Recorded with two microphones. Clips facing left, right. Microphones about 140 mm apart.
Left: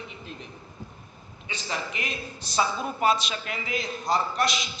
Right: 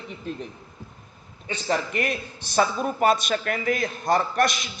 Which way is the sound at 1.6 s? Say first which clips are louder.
Right 8 dB; 50° right (ahead or behind).